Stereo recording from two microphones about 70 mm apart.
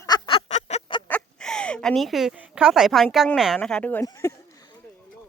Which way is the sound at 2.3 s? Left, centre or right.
Centre.